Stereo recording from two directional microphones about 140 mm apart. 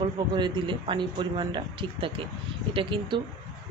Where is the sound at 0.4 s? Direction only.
35° right (ahead or behind).